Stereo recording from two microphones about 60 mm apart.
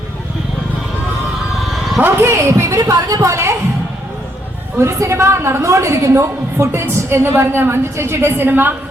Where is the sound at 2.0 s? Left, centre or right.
Right.